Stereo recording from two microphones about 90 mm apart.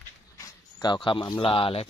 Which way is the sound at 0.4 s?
40° left (ahead or behind).